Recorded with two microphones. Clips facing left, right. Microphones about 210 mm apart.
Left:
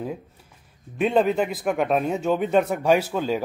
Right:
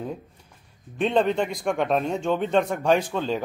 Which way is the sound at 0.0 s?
5° left (ahead or behind).